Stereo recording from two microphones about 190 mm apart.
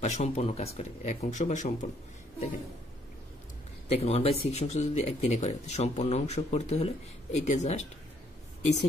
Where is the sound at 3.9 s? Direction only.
35° left (ahead or behind).